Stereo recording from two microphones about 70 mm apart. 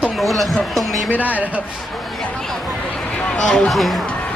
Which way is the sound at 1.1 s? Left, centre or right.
Right.